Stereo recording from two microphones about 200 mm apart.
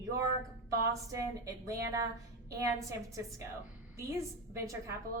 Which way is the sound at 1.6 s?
15° right (ahead or behind).